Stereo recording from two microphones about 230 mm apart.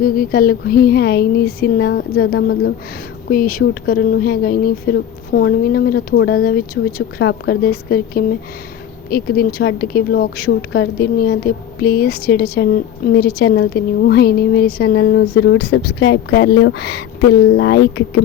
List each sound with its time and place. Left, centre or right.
0.0 s a woman's voice: left